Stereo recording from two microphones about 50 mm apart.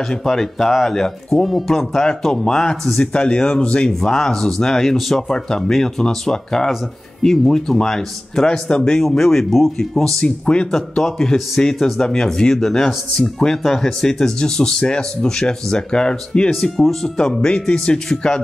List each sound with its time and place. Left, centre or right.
0.1 s speech: centre
4.1 s speech: centre
10.2 s speech: left
10.7 s speech: centre